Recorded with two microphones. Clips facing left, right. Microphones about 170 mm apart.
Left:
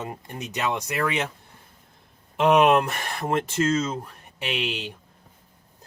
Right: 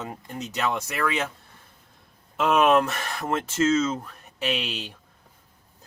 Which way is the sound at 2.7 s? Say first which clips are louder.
Even; 15° left (ahead or behind).